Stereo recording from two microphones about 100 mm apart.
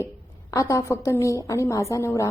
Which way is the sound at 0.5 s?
30° left (ahead or behind).